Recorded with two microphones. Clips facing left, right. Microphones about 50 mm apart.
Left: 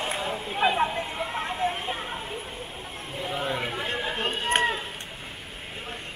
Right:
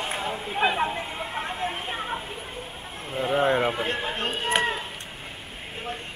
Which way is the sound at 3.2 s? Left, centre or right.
Right.